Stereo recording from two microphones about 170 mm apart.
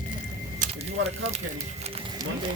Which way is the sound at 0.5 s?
40° right (ahead or behind).